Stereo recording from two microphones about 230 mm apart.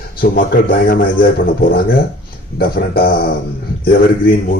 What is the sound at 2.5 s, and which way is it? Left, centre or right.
Speech, left.